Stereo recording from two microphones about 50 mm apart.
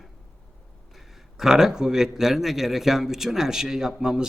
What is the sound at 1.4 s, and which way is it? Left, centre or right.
A man's voice, centre.